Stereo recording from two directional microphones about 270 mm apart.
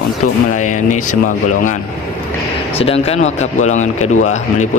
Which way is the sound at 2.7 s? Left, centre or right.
Left.